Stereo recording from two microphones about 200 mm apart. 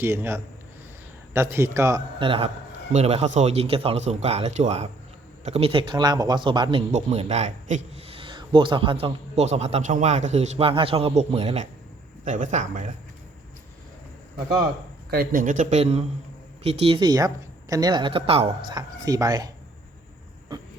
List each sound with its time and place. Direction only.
0.0 s a man's voice: 10° right (ahead or behind); by 12.9 s 35° right (ahead or behind)
15.1 s a man's voice: 45° right (ahead or behind); by 19.5 s 20° right (ahead or behind)